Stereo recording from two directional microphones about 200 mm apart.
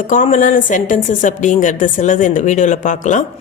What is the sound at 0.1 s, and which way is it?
A woman's voice, 40° left (ahead or behind).